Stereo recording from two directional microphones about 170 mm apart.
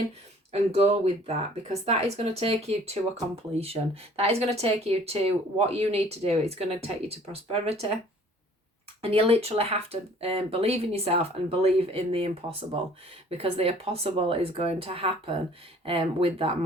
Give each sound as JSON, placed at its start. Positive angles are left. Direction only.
{"t": 0.5, "sound": "speech", "side_deg": -35}
{"t": 9.0, "sound": "speech", "side_deg": -35}